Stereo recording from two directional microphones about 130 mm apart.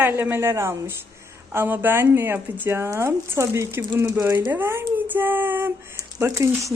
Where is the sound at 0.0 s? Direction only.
20° right (ahead or behind).